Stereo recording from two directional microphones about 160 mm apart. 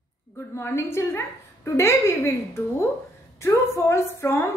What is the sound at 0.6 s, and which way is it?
A woman's voice, 15° left (ahead or behind).